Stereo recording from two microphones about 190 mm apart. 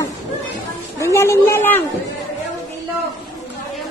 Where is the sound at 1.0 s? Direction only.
15° left (ahead or behind).